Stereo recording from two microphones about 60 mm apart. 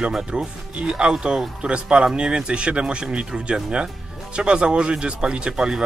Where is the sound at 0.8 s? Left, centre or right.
Centre.